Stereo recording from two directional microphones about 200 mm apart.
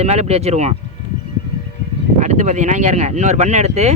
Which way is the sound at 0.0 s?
35° right (ahead or behind).